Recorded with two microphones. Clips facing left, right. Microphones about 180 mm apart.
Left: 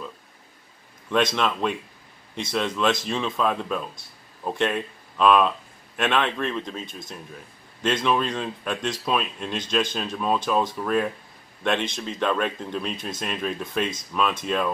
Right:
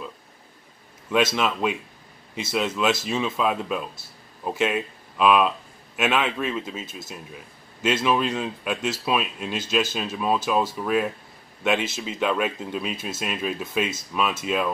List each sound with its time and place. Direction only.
1.1 s speech: 5° right (ahead or behind)